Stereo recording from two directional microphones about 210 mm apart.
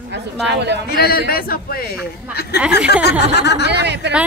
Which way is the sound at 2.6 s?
5° right (ahead or behind).